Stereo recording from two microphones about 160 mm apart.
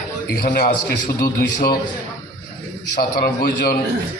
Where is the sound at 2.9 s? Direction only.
70° left (ahead or behind).